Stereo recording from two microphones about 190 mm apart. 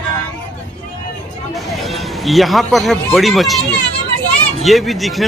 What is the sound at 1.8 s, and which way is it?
Speech, centre (ahead or behind).